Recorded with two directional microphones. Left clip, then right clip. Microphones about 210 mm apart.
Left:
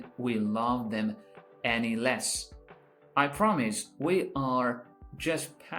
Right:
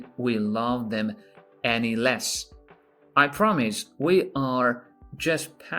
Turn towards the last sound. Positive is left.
turn(degrees=-50)  # may be behind; listen again after turning